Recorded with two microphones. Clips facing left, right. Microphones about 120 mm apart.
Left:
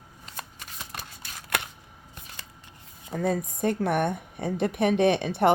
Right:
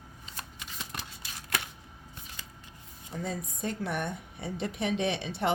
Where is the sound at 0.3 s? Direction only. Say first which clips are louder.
Left 3 dB; 45° left (ahead or behind).